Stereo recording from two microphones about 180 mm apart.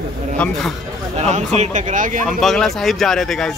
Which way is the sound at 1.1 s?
40° right (ahead or behind).